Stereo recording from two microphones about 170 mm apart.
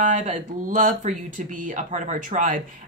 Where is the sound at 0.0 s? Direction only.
45° right (ahead or behind).